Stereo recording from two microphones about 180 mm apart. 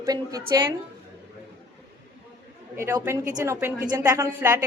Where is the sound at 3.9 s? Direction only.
20° right (ahead or behind).